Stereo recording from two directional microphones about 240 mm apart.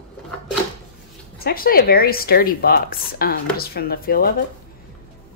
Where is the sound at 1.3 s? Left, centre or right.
Left.